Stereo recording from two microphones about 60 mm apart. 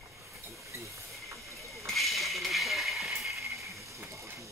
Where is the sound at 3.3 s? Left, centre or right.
Right.